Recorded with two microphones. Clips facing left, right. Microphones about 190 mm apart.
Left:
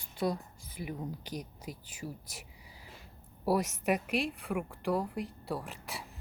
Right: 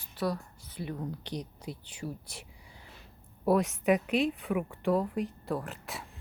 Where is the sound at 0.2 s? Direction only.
15° left (ahead or behind).